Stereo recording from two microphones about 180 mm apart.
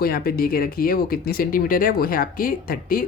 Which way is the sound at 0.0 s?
55° left (ahead or behind).